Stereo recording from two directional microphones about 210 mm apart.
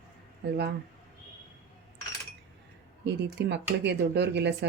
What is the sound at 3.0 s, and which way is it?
Speech, 55° right (ahead or behind).